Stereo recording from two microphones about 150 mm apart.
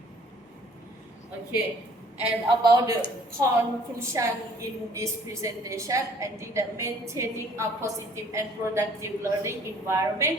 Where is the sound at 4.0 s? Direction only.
20° right (ahead or behind).